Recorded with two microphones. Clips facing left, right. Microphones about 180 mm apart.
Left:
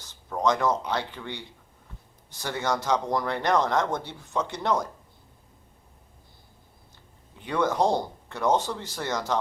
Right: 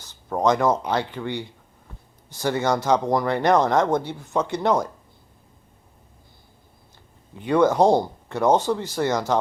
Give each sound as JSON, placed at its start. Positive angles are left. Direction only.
{"t": 0.4, "sound": "speech", "side_deg": -50}
{"t": 7.3, "sound": "speech", "side_deg": -50}